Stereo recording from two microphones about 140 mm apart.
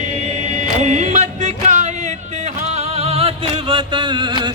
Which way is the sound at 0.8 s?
55° right (ahead or behind).